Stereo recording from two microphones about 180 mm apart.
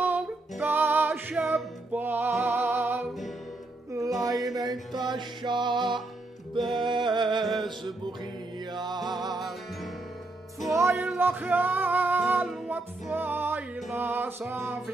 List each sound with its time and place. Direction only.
0.0 s music: 10° right (ahead or behind); by 7.4 s 25° right (ahead or behind)
7.4 s music: centre (ahead or behind)
8.7 s music: 25° right (ahead or behind)
10.9 s music: centre (ahead or behind)